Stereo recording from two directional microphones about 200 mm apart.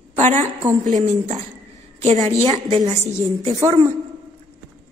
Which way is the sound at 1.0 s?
35° right (ahead or behind).